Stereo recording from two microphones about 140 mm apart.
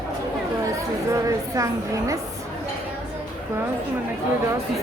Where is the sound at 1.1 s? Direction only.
20° right (ahead or behind).